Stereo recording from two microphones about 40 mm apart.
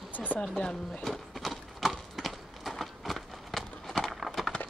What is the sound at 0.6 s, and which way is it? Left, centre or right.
Speech, left.